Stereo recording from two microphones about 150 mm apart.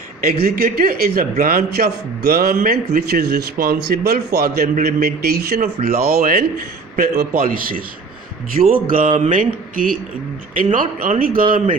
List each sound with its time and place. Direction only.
0.4 s speech: 90° right; by 9.0 s 70° right (ahead or behind)
9.1 s speech: 55° right (ahead or behind); by 11.4 s 70° right (ahead or behind)